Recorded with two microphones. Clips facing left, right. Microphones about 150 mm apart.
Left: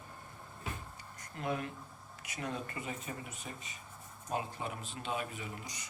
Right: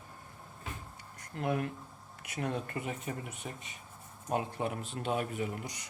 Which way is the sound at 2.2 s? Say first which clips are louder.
Right 4 dB; 60° right (ahead or behind).